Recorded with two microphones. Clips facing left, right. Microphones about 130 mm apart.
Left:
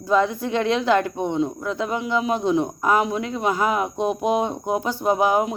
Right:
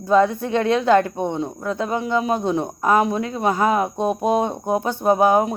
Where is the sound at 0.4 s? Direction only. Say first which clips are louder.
Right 2 dB; 35° right (ahead or behind).